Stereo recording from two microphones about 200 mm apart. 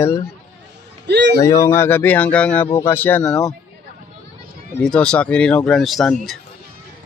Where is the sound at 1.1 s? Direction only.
60° right (ahead or behind).